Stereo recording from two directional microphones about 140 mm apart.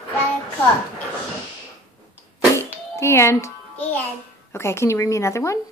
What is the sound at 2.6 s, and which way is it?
Music, 20° left (ahead or behind).